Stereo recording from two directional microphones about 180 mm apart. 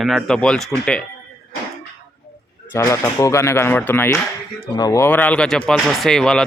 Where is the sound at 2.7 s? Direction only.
15° left (ahead or behind).